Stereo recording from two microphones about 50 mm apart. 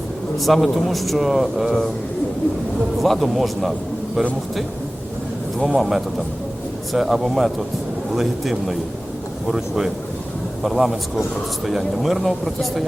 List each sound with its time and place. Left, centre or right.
0.3 s speech: centre
3.0 s speech: centre
5.5 s speech: centre